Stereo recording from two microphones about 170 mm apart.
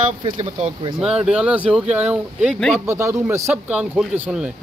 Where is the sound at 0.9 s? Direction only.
5° right (ahead or behind).